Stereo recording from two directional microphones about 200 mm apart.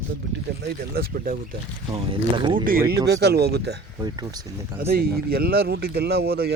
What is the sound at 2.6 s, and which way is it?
Speech, 45° right (ahead or behind).